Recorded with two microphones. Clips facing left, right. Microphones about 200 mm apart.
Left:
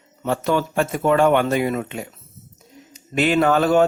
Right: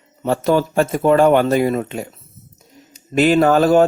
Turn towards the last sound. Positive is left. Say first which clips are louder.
# right 4 dB
turn(degrees=-40)  # may be behind; listen again after turning